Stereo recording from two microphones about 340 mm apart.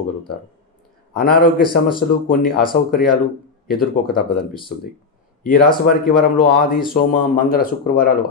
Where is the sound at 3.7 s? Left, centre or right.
Left.